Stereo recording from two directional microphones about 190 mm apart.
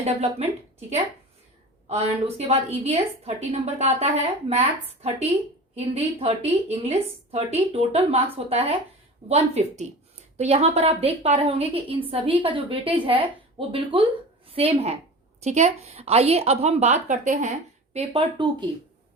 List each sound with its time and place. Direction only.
0.0 s a woman's voice: 35° right (ahead or behind)
1.9 s a woman's voice: 35° right (ahead or behind)
5.7 s a woman's voice: 30° right (ahead or behind)